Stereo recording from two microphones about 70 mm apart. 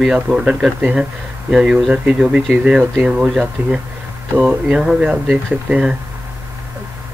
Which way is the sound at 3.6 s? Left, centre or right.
Right.